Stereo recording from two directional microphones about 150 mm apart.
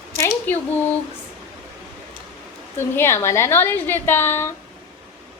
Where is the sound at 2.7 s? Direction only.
15° left (ahead or behind).